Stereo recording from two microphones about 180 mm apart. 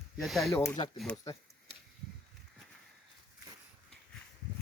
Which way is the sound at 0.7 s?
25° left (ahead or behind).